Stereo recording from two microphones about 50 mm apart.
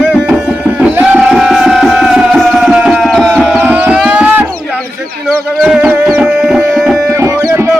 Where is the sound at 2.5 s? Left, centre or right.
Centre.